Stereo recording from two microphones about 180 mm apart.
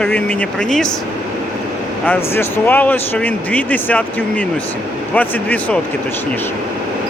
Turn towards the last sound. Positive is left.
turn(degrees=10)  # may be behind; listen again after turning